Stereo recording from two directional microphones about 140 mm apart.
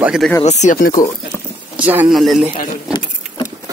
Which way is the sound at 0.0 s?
5° right (ahead or behind).